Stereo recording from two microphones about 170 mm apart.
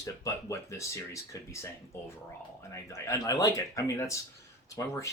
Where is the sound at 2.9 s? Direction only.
15° left (ahead or behind).